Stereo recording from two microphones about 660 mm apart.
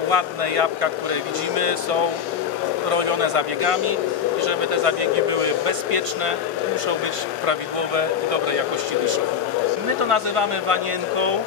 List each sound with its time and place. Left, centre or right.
0.1 s speech: right
7.4 s speech: right
10.0 s speech: right